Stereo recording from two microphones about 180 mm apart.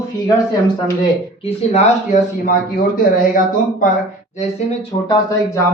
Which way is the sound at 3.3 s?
45° left (ahead or behind).